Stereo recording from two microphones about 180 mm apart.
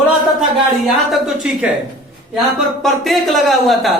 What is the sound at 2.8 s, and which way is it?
Speech, centre (ahead or behind).